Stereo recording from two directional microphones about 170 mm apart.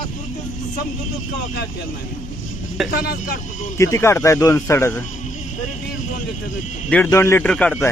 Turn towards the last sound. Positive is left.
turn(degrees=5)  # may be behind; listen again after turning